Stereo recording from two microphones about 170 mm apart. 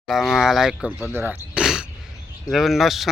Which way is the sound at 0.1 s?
Centre (ahead or behind).